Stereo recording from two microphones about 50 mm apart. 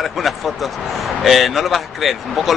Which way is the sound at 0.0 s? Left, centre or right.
Centre.